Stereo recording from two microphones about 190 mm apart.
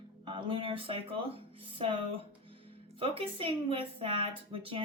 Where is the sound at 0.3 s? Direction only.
25° right (ahead or behind).